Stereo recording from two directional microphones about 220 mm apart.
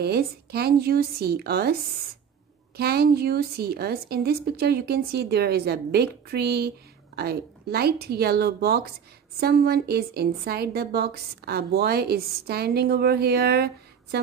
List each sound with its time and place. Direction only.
0.0 s a woman's voice: 45° right (ahead or behind)
2.8 s a woman's voice: 45° right (ahead or behind)